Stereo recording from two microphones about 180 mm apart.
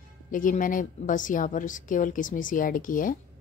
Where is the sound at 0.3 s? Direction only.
50° left (ahead or behind).